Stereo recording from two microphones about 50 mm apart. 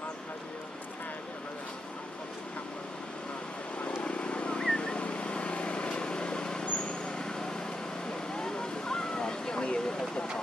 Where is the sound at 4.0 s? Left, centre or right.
Left.